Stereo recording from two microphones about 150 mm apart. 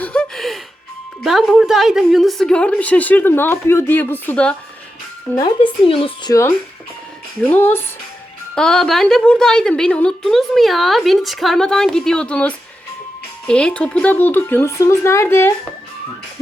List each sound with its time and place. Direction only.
0.0 s music: 5° left (ahead or behind)
1.2 s a woman's voice: centre (ahead or behind)
5.4 s a woman's voice: 35° left (ahead or behind)
7.4 s a woman's voice: 10° left (ahead or behind)